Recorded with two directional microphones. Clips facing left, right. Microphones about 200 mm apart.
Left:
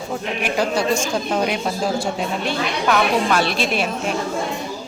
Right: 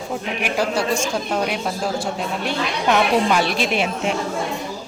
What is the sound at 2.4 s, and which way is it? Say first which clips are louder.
A woman's voice: left 1 dB; 20° right (ahead or behind).